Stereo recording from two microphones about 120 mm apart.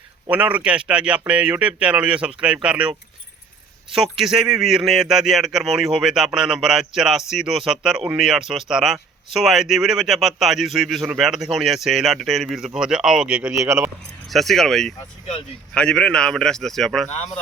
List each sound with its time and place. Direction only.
0.3 s speech: 15° right (ahead or behind)
3.9 s speech: 5° right (ahead or behind)
13.7 s speech: 20° right (ahead or behind)
14.3 s speech: centre (ahead or behind)